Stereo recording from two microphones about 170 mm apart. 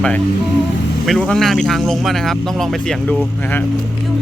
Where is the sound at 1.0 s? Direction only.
Centre (ahead or behind).